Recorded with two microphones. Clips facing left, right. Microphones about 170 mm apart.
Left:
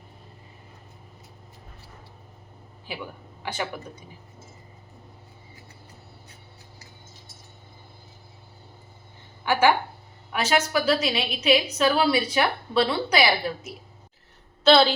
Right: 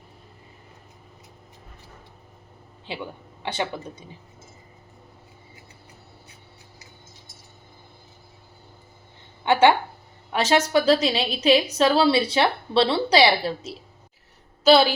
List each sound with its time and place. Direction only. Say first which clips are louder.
2.9 s a woman's voice: right 3 dB; 25° right (ahead or behind)
9.4 s a sound: right 3 dB; 25° right (ahead or behind)
10.3 s a woman's voice: right 4 dB; 30° right (ahead or behind)
14.6 s a woman's voice: right 1 dB; 10° right (ahead or behind)